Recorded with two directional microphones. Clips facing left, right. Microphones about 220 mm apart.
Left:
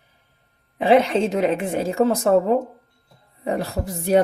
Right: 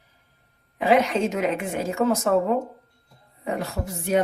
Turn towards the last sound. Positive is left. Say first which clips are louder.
# left 5 dB
turn(degrees=35)  # may be behind; listen again after turning